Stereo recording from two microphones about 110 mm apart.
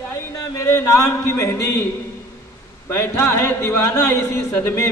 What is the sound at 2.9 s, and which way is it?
A man's voice, 25° left (ahead or behind).